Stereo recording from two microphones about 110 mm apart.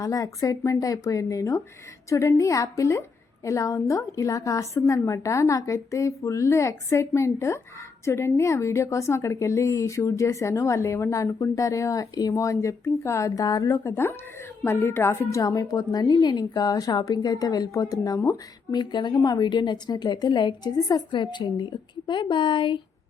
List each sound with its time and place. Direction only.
0.0 s a woman's voice: 30° left (ahead or behind)
15.4 s a woman's voice: 35° left (ahead or behind); by 22.8 s 50° left (ahead or behind)